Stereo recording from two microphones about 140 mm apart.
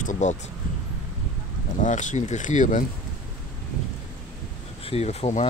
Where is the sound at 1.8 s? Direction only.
60° left (ahead or behind).